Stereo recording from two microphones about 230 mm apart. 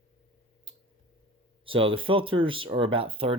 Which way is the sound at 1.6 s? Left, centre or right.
Right.